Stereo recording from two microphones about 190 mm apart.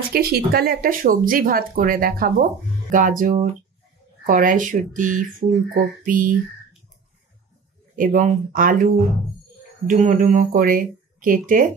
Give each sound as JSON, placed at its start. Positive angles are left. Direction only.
{"t": 0.1, "sound": "speech", "side_deg": -55}
{"t": 7.9, "sound": "speech", "side_deg": -45}
{"t": 9.8, "sound": "speech", "side_deg": -40}